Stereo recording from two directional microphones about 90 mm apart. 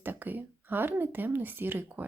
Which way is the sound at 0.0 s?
20° right (ahead or behind).